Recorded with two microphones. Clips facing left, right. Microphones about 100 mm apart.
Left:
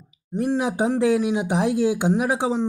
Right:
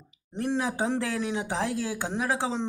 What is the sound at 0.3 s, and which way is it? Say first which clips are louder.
Speech: left 6 dB; 10° left (ahead or behind).